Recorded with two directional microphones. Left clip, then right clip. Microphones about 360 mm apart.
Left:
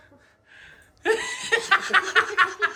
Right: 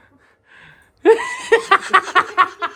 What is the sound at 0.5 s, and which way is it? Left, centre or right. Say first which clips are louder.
Chuckle: right 3 dB; centre.